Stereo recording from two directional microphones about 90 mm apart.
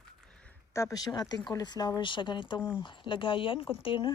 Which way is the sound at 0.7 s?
35° left (ahead or behind).